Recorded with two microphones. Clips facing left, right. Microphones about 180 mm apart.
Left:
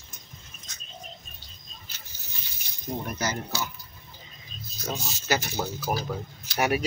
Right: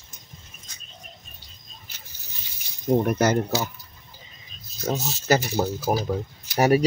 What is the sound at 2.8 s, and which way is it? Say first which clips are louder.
Speech: right 11 dB; 55° right (ahead or behind).